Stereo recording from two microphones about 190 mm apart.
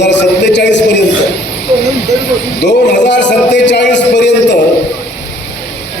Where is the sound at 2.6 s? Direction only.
65° left (ahead or behind).